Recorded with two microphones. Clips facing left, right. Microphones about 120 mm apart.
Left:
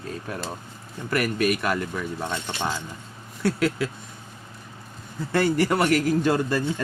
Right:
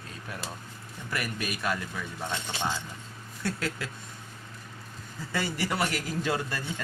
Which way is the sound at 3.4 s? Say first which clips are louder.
Left 9 dB; 75° left (ahead or behind).